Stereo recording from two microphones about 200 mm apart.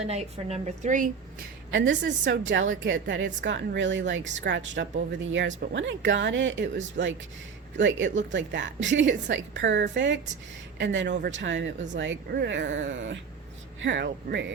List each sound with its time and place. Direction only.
0.0 s a woman's voice: 30° right (ahead or behind)
1.7 s a woman's voice: 65° right (ahead or behind)
7.8 s a woman's voice: 65° right (ahead or behind)